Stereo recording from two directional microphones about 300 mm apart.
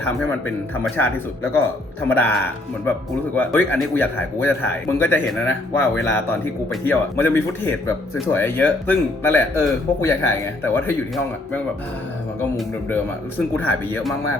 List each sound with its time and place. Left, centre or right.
0.0 s speech: centre
3.3 s speech: centre
12.4 s speech: centre